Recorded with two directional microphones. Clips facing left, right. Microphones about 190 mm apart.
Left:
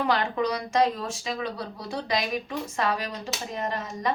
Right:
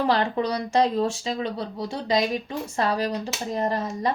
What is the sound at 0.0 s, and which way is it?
A woman's voice, 35° right (ahead or behind).